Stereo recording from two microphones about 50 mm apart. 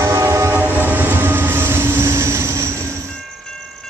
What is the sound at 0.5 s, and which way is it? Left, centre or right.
Train, right.